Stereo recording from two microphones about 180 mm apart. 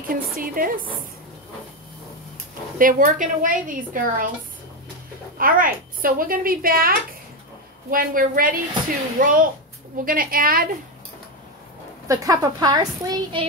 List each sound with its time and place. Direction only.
0.4 s speech: 50° right (ahead or behind)
2.8 s speech: 50° right (ahead or behind)
5.4 s speech: 50° right (ahead or behind)
12.1 s a woman's voice: 20° right (ahead or behind)